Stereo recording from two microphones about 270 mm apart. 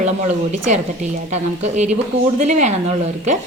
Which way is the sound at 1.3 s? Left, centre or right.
Right.